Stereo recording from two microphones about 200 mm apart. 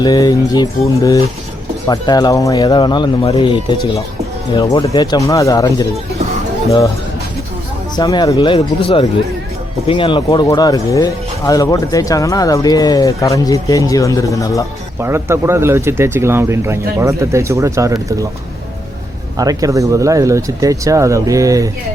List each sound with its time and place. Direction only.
0.0 s speech: 20° left (ahead or behind)
7.9 s speech: 20° left (ahead or behind)
14.9 s speech: 10° right (ahead or behind)
19.4 s speech: 15° right (ahead or behind)